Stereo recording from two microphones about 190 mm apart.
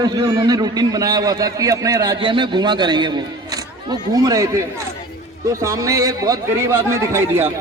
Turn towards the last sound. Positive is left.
turn(degrees=-10)  # may be behind; listen again after turning